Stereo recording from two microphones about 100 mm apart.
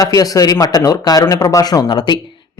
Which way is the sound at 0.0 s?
40° left (ahead or behind).